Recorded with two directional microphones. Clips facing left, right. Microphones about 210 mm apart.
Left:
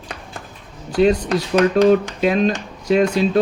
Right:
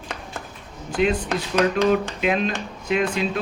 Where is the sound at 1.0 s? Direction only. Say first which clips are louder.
Left 6 dB; 35° left (ahead or behind).